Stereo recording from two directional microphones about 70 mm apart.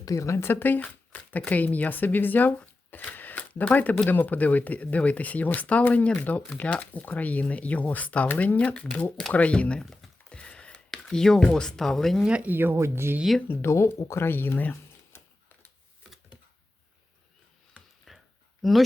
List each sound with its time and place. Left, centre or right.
0.0 s speech: left
0.5 s speech: left
10.2 s a sound: centre
10.9 s speech: centre
12.2 s speech: centre
12.5 s speech: right
13.5 s speech: left
18.1 s a sound: centre
18.6 s speech: centre